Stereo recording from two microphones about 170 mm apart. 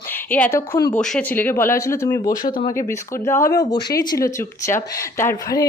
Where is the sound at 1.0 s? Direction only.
5° left (ahead or behind).